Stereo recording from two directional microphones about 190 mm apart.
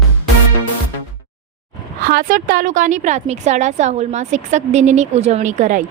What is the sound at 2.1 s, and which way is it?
A woman's voice, 50° right (ahead or behind).